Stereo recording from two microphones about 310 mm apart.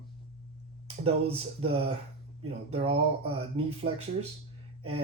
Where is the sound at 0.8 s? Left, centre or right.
Centre.